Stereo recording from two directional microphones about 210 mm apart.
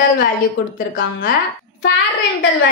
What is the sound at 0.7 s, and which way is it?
Speech, 45° left (ahead or behind).